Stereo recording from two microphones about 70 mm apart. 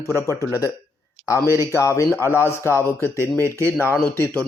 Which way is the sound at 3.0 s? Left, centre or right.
Left.